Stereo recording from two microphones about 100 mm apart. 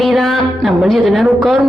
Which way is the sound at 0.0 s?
Centre (ahead or behind).